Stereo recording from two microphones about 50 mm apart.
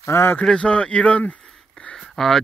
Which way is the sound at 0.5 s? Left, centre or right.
Left.